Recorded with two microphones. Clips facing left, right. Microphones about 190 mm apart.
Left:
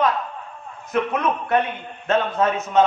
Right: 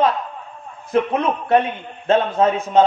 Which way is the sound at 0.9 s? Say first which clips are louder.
Right 3 dB; 30° right (ahead or behind).